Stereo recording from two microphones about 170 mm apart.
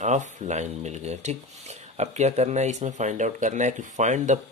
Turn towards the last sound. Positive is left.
turn(degrees=-45)  # may be behind; listen again after turning